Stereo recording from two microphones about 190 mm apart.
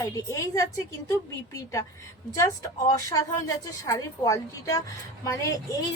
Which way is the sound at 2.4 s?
15° left (ahead or behind).